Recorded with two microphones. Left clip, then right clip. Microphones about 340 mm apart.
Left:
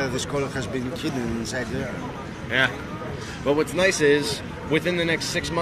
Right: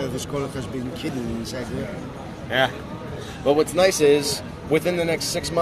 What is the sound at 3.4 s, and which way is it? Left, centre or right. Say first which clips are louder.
Speech: right 3 dB; right.